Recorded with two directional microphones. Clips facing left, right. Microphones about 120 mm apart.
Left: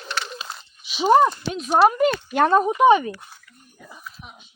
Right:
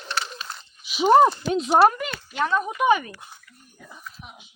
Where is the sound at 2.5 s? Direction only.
25° left (ahead or behind).